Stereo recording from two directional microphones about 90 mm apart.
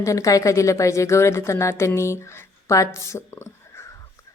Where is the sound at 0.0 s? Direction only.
40° left (ahead or behind).